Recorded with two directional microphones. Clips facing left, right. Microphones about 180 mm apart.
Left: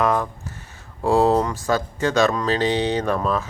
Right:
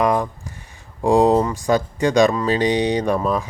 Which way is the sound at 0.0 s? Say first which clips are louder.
Right 2 dB; 15° right (ahead or behind).